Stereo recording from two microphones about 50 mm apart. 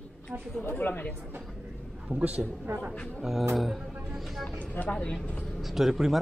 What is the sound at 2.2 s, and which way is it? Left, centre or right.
Speech, right.